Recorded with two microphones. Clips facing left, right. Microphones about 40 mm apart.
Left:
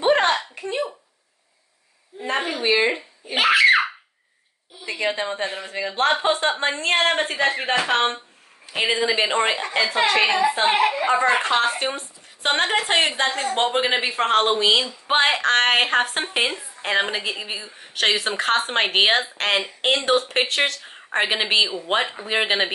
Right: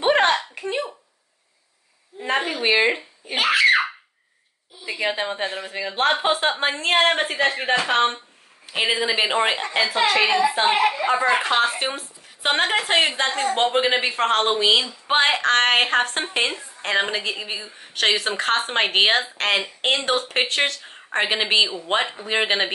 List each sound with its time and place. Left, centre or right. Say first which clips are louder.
0.0 s a sound: even; right
2.3 s a woman's voice: right 1 dB; centre
2.6 s speech: even; right
3.3 s screaming: left 2 dB; centre
4.8 s a woman's voice: even; centre